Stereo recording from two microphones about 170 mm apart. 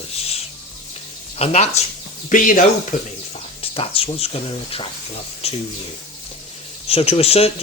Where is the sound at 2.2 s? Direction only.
50° left (ahead or behind).